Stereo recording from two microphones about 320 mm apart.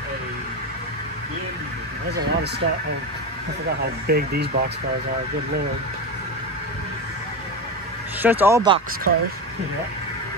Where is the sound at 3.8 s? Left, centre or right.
Right.